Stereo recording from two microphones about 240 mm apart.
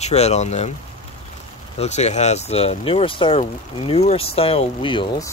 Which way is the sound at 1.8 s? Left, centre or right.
Left.